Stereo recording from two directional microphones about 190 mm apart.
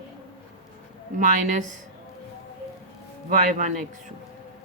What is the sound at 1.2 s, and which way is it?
Speech, 40° right (ahead or behind).